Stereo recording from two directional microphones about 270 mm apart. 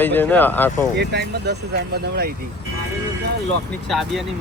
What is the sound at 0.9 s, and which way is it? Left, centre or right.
Speech, right.